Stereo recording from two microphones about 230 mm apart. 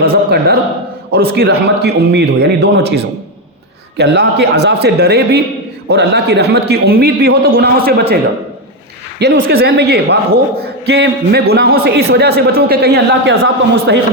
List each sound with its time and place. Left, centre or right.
0.0 s a sound: right
1.3 s a man's voice: right
9.1 s a man's voice: right